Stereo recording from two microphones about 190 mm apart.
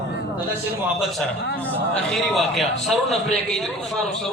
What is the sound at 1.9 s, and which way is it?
A man's voice, centre (ahead or behind).